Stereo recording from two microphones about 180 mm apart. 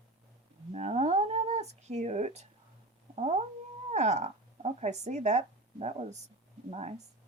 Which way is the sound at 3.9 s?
40° right (ahead or behind).